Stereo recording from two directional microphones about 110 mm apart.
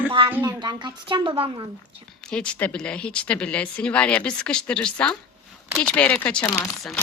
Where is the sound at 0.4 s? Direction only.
40° right (ahead or behind).